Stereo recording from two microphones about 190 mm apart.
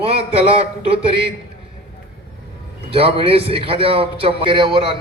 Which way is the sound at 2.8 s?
30° right (ahead or behind).